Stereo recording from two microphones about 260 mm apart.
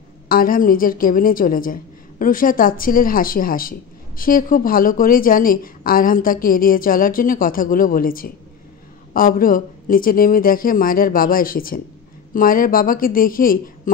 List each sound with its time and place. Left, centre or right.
0.3 s a woman's voice: left